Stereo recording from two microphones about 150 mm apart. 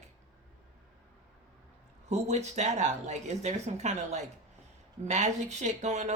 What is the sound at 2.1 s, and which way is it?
Speech, 50° right (ahead or behind).